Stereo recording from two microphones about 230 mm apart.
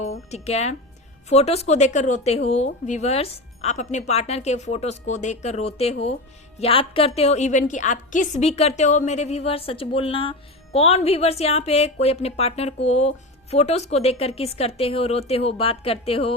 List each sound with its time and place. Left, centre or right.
0.3 s a woman's voice: left